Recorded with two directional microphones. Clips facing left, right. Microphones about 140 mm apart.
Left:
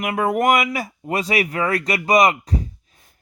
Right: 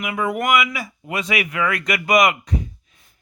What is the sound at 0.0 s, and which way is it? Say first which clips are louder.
Speech: left 4 dB; 50° left (ahead or behind).